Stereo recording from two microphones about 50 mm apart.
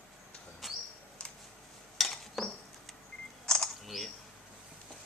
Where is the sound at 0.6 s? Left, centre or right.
Centre.